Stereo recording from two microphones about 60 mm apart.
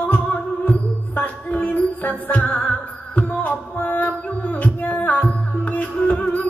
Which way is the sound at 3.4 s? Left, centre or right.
Left.